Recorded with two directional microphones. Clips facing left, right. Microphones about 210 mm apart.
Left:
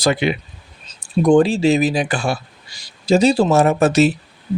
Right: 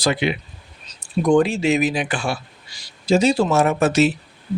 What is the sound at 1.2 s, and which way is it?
Speech, 35° left (ahead or behind).